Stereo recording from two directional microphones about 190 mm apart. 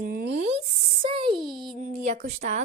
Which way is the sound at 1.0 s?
30° right (ahead or behind).